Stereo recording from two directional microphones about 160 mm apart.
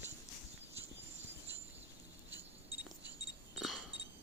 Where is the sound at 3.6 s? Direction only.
Centre (ahead or behind).